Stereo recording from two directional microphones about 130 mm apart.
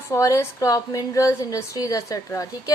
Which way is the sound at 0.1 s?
25° left (ahead or behind).